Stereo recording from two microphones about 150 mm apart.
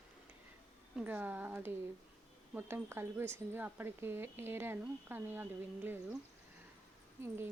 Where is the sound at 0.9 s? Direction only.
10° right (ahead or behind).